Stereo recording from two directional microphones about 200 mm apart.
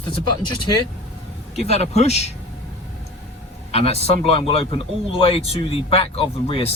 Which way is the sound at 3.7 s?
30° left (ahead or behind).